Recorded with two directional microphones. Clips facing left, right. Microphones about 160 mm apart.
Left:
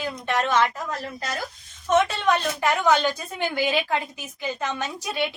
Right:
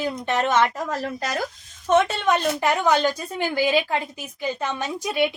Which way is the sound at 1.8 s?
25° right (ahead or behind).